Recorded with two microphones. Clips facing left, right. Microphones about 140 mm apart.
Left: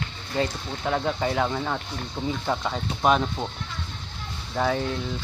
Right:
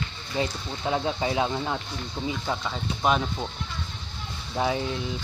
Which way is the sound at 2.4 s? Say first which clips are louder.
Left 3 dB; 10° left (ahead or behind).